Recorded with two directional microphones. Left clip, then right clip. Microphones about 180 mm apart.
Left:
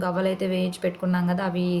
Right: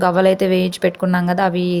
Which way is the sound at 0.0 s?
45° right (ahead or behind).